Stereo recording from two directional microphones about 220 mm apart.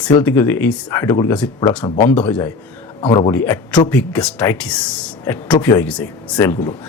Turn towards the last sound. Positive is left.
turn(degrees=10)  # may be behind; listen again after turning